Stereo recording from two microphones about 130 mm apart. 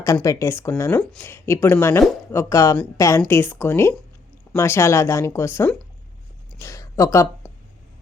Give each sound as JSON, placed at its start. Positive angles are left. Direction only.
{"t": 0.0, "sound": "speech", "side_deg": 25}